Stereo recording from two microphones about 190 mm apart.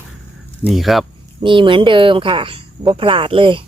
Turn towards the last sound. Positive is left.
turn(degrees=-25)  # may be behind; listen again after turning